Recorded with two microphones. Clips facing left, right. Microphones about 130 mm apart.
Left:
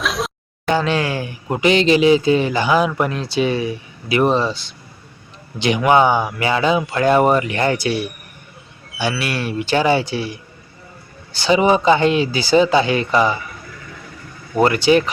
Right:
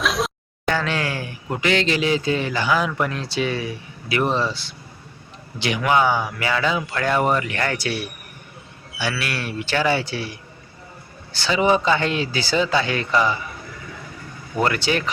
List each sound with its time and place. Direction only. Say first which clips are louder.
0.0 s a sound: even; centre (ahead or behind)
0.7 s a man's voice: left 5 dB; 20° left (ahead or behind)
11.3 s speech: left 4 dB; 15° left (ahead or behind)
14.5 s a man's voice: left 7 dB; 20° left (ahead or behind)